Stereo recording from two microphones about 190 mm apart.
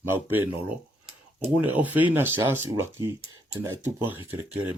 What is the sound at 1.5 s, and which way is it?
Speech, 10° right (ahead or behind).